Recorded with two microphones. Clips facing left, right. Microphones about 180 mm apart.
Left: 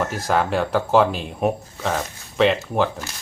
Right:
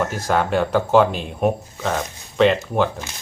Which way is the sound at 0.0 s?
Centre (ahead or behind).